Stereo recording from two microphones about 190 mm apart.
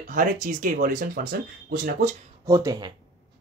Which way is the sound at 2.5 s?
20° right (ahead or behind).